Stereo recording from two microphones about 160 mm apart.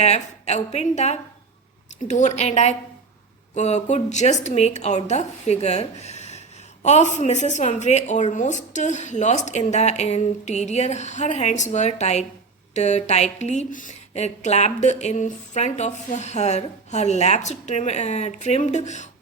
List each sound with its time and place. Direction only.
0.0 s a woman's voice: 45° left (ahead or behind)